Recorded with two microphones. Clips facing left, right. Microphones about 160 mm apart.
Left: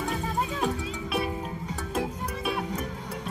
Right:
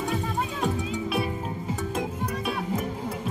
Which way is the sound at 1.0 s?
Centre (ahead or behind).